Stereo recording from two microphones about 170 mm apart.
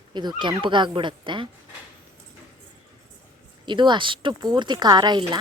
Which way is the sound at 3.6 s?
25° right (ahead or behind).